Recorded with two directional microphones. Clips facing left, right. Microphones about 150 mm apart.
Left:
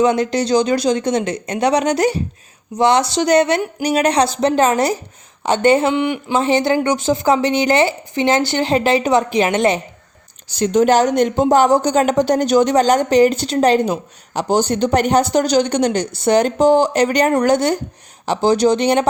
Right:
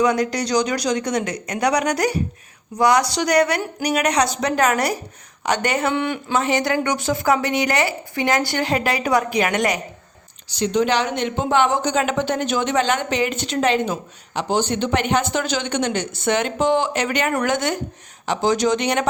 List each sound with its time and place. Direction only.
0.0 s speech: 25° left (ahead or behind)
5.9 s speech: 15° left (ahead or behind)
6.3 s speech: 25° left (ahead or behind)
10.5 s speech: 45° left (ahead or behind)